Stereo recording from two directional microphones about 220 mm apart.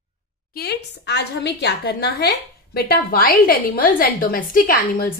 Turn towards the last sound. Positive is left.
turn(degrees=40)  # may be behind; listen again after turning